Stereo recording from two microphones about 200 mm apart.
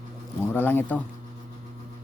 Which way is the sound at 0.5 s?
10° left (ahead or behind).